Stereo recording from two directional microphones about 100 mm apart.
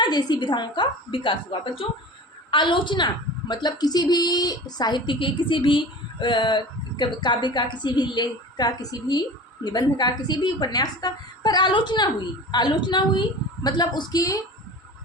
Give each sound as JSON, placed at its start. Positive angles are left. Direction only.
{"t": 0.0, "sound": "a woman's voice", "side_deg": 45}